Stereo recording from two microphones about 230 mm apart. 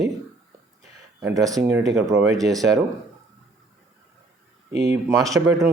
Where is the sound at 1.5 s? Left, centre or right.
Centre.